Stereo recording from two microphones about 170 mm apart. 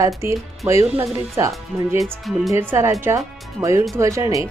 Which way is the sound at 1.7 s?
5° right (ahead or behind).